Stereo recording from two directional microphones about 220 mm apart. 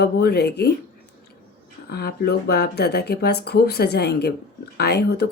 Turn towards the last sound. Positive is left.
turn(degrees=50)  # may be behind; listen again after turning